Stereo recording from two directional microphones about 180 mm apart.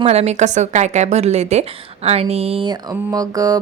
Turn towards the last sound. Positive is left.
turn(degrees=-20)  # may be behind; listen again after turning